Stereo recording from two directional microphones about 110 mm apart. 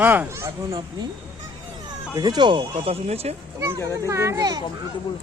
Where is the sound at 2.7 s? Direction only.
70° right (ahead or behind).